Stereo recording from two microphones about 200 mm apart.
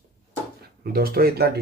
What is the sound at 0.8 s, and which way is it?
Speech, 50° right (ahead or behind).